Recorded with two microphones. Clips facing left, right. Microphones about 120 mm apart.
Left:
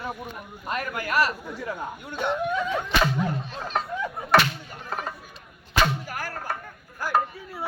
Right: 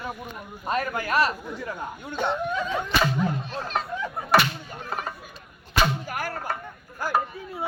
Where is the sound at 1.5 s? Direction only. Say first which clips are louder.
Left 1 dB; 10° left (ahead or behind).